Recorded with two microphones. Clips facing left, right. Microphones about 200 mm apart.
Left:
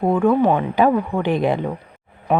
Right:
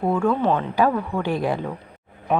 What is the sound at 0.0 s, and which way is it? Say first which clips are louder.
A woman's voice: left 4 dB; 15° left (ahead or behind).